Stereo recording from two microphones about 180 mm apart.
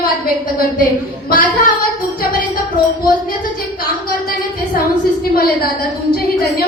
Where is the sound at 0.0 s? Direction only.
50° left (ahead or behind).